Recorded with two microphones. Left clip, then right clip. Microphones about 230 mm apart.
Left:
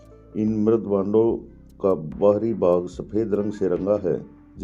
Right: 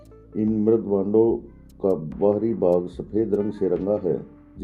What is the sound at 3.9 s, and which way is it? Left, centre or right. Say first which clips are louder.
Speech: left 1 dB; left.